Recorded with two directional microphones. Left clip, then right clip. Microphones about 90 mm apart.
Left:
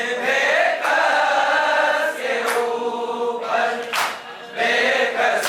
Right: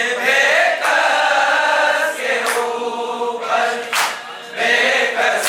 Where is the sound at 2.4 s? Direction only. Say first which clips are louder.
Right 2 dB; 35° left (ahead or behind).